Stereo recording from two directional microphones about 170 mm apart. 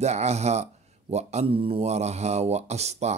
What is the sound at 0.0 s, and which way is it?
Speech, 40° right (ahead or behind).